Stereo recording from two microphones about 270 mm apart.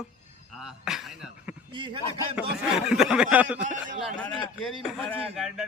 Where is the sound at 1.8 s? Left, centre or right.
Centre.